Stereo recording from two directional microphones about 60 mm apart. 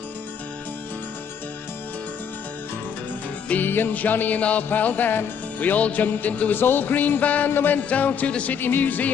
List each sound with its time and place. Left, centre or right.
3.4 s music: left